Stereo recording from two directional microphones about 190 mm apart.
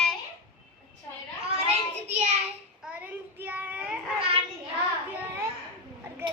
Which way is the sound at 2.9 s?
5° right (ahead or behind).